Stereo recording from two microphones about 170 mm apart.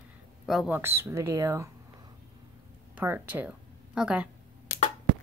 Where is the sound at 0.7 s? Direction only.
15° right (ahead or behind).